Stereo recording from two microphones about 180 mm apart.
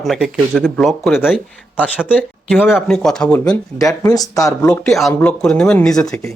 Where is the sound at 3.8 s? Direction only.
20° left (ahead or behind).